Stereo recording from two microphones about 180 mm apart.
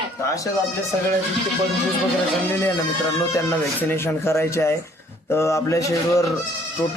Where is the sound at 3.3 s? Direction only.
15° left (ahead or behind).